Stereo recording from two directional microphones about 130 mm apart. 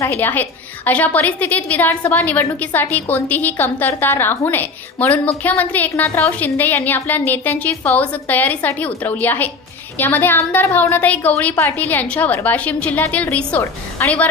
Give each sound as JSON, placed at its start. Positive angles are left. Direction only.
{"t": 0.0, "sound": "a woman's voice", "side_deg": 15}